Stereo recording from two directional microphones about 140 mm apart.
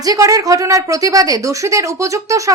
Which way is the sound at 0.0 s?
25° right (ahead or behind).